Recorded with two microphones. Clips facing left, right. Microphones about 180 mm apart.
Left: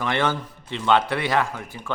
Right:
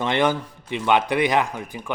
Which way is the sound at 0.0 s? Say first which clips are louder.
Right 3 dB; 20° right (ahead or behind).